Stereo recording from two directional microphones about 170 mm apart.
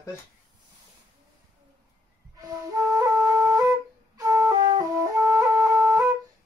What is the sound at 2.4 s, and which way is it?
Flute, 20° right (ahead or behind).